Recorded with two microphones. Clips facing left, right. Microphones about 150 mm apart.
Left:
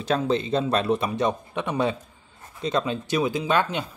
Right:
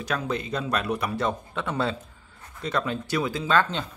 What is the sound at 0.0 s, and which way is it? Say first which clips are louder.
A man's voice: left 5 dB; 25° left (ahead or behind).